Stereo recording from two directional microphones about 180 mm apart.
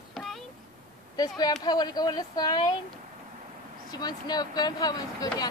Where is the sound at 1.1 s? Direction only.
20° left (ahead or behind).